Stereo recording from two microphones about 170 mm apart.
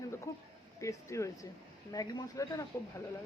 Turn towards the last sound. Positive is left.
turn(degrees=20)  # may be behind; listen again after turning